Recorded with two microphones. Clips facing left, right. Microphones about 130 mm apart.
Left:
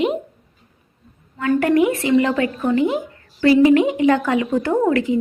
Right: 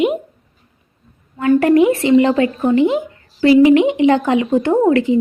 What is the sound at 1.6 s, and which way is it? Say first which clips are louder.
A woman's voice: right 4 dB; 25° right (ahead or behind).